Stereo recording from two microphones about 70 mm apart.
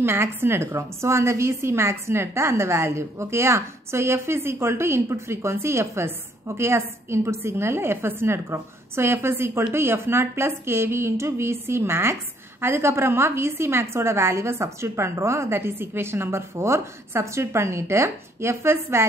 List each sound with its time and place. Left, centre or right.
0.0 s a woman's voice: right